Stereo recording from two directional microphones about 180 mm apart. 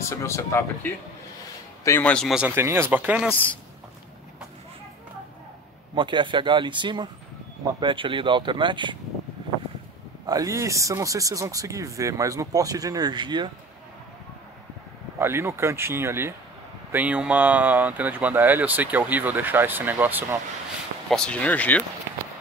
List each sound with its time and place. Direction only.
0.0 s speech: 15° left (ahead or behind); by 3.5 s 10° right (ahead or behind)
5.9 s speech: 25° right (ahead or behind)
10.2 s speech: 20° right (ahead or behind)
15.1 s speech: 15° right (ahead or behind)
21.1 s speech: 5° left (ahead or behind)